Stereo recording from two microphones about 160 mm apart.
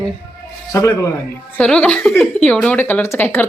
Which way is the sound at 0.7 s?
20° left (ahead or behind).